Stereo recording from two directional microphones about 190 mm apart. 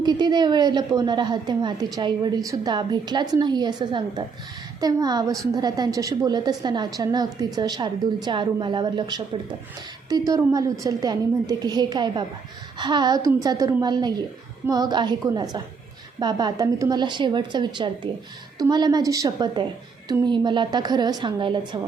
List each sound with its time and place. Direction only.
0.0 s a woman's voice: 20° right (ahead or behind)